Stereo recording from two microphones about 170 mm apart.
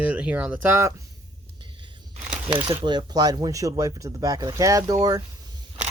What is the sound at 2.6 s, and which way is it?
Speech, 30° right (ahead or behind).